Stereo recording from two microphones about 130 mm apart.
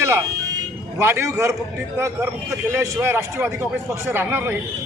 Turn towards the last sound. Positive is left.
turn(degrees=-15)  # may be behind; listen again after turning